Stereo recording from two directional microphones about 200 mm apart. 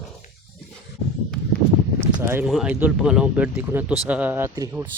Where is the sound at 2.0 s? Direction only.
15° right (ahead or behind).